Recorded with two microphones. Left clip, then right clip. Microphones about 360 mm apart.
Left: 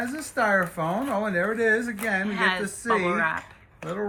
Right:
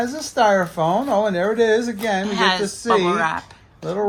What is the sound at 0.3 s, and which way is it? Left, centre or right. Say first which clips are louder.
Speech: right 7 dB; centre.